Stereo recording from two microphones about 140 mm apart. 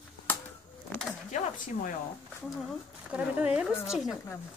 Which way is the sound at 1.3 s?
65° left (ahead or behind).